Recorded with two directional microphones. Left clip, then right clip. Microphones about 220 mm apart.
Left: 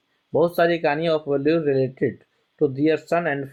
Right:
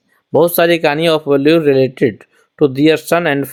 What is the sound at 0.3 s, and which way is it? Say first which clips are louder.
Speech: right 8 dB; 50° right (ahead or behind).